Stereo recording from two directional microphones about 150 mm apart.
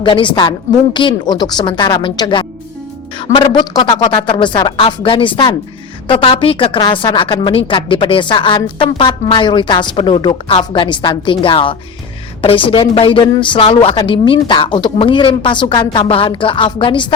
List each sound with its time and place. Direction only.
0.0 s speech: 35° left (ahead or behind)